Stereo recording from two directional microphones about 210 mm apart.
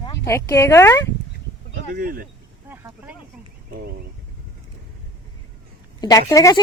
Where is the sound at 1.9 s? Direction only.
45° right (ahead or behind).